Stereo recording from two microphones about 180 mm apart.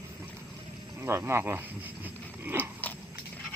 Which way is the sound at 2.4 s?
10° right (ahead or behind).